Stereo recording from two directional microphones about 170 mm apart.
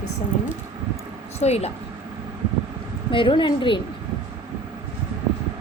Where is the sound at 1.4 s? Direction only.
40° left (ahead or behind).